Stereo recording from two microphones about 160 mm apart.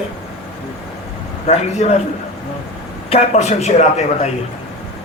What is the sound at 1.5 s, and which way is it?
Speech, 45° left (ahead or behind).